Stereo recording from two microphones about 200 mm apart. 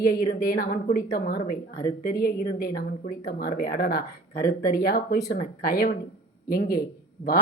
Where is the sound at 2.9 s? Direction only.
40° left (ahead or behind).